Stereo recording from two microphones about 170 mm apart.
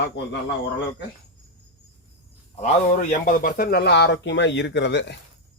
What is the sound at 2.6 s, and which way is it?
A man's voice, 50° left (ahead or behind).